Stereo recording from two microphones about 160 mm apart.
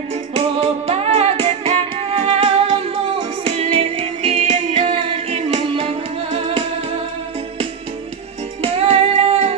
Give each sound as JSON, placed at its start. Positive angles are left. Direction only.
{"t": 0.3, "sound": "music", "side_deg": -35}
{"t": 8.5, "sound": "music", "side_deg": -40}